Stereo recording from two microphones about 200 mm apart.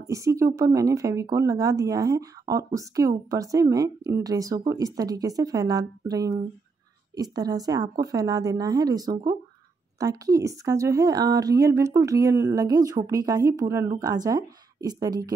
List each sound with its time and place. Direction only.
0.0 s speech: 15° right (ahead or behind)